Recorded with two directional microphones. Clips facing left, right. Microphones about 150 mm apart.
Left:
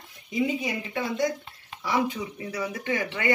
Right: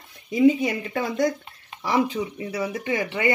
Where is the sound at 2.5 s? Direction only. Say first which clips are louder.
Right 3 dB; 20° right (ahead or behind).